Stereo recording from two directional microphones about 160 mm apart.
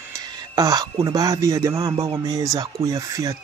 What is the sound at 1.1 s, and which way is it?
Speech, 20° right (ahead or behind).